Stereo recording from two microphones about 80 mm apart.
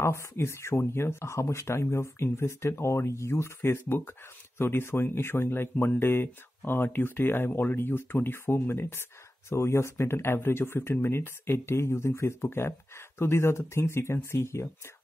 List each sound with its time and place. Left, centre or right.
0.0 s speech: left